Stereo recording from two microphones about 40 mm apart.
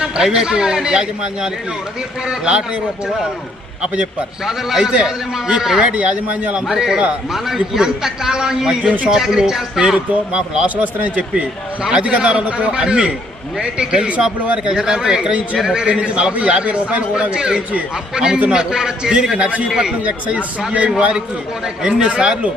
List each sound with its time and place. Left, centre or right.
0.0 s a man's voice: centre
4.4 s speech: centre
5.8 s a man's voice: right
6.7 s speech: centre
8.8 s a man's voice: right
9.0 s speech: centre
10.8 s a man's voice: right; by 19.4 s centre
19.4 s a man's voice: right
19.6 s a man's voice: centre
20.1 s a man's voice: right
21.8 s a man's voice: right